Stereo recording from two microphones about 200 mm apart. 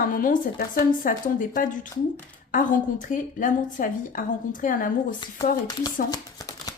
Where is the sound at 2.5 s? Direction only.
40° left (ahead or behind).